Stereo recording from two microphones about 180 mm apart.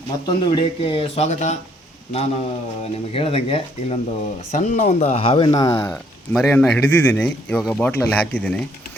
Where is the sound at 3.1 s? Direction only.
35° left (ahead or behind); by 5.9 s 15° left (ahead or behind).